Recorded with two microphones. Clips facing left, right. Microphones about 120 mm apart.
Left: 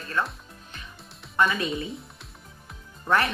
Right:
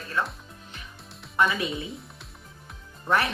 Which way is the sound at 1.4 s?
5° right (ahead or behind).